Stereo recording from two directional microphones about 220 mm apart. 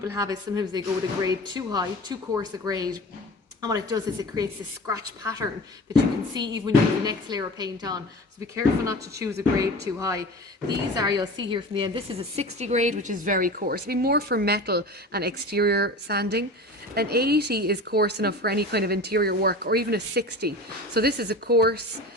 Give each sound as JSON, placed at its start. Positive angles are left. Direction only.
{"t": 0.0, "sound": "a woman's voice", "side_deg": -15}